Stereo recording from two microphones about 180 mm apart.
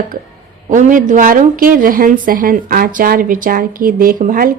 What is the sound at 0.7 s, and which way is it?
Speech, 45° right (ahead or behind).